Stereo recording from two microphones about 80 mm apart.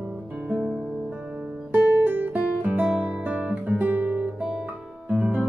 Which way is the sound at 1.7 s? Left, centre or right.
Right.